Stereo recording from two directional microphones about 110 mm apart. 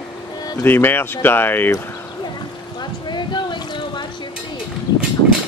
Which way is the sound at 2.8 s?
45° left (ahead or behind).